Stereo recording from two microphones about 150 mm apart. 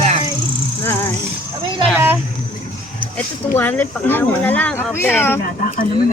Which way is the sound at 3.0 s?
10° left (ahead or behind).